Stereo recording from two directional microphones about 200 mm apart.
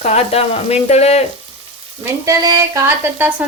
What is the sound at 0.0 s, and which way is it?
Speech, 30° left (ahead or behind).